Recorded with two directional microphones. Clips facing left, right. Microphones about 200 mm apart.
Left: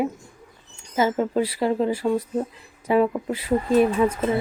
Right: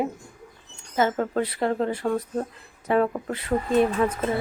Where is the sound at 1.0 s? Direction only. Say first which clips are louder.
Left 2 dB; 10° left (ahead or behind).